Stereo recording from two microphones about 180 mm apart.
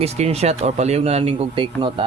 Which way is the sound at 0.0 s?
35° right (ahead or behind).